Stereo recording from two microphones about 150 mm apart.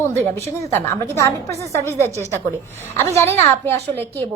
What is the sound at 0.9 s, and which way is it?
A woman's voice, 20° left (ahead or behind).